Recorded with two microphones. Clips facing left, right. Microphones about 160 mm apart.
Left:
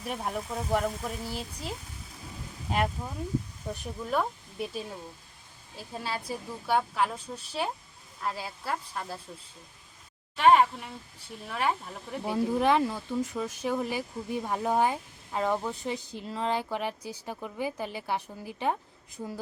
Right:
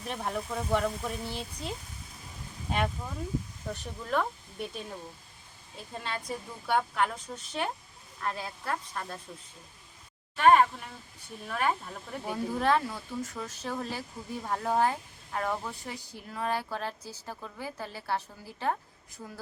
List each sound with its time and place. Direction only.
0.1 s speech: 10° left (ahead or behind)
10.3 s speech: 10° left (ahead or behind)